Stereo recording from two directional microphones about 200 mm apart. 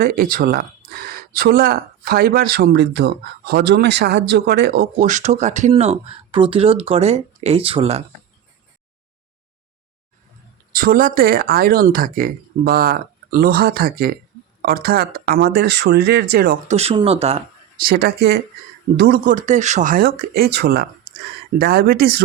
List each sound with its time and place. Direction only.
0.0 s speech: 50° right (ahead or behind); by 8.0 s 30° right (ahead or behind)
10.7 s speech: 45° right (ahead or behind)
16.6 s speech: 30° right (ahead or behind)
17.7 s speech: 50° right (ahead or behind)